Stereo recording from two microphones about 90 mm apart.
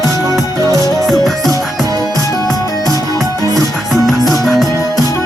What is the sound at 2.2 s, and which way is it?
Music, 40° left (ahead or behind).